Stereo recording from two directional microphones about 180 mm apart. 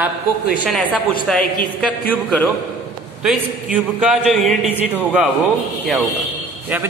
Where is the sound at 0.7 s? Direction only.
Centre (ahead or behind).